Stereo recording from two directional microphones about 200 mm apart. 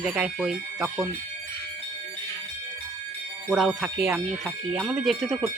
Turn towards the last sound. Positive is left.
turn(degrees=0)  # may be behind; listen again after turning